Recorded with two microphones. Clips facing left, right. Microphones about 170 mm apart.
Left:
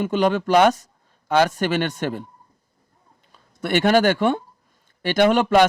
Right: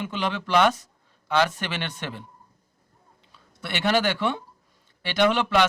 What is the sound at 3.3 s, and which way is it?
Speech, 45° left (ahead or behind).